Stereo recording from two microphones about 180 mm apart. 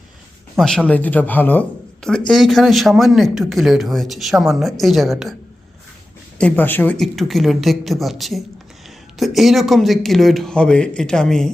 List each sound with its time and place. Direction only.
0.6 s speech: 5° left (ahead or behind)
6.4 s speech: 10° left (ahead or behind)